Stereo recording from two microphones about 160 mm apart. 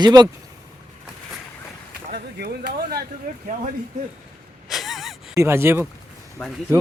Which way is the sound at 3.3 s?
55° right (ahead or behind).